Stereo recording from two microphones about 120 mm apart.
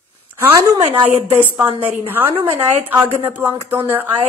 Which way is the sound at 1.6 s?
15° right (ahead or behind).